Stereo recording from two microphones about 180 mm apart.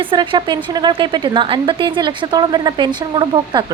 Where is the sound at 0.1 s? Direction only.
25° right (ahead or behind).